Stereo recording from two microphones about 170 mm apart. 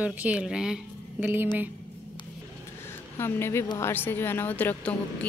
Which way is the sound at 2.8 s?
15° left (ahead or behind).